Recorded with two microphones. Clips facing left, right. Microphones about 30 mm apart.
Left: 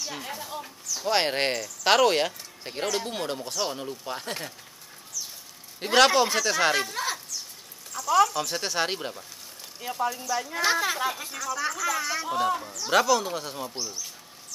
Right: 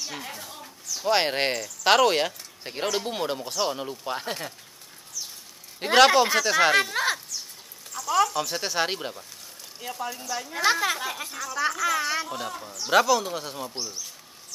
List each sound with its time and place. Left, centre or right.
0.0 s a sound: centre
0.9 s speech: centre
4.3 s speech: centre
5.8 s speech: centre
6.9 s speech: right
7.9 s speech: centre
9.8 s speech: centre
10.0 s speech: centre
11.7 s speech: centre
12.3 s speech: centre
12.8 s speech: centre